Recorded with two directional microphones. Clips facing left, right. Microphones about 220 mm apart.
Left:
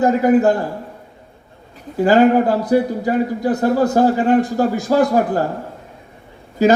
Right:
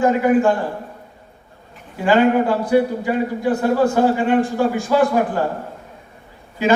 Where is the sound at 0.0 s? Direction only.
40° left (ahead or behind).